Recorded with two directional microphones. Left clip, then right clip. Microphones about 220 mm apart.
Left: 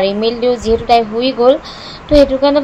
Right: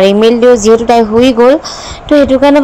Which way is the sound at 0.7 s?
35° right (ahead or behind).